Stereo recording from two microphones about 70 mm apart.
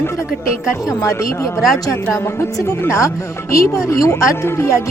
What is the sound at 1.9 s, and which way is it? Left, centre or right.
Speech, left.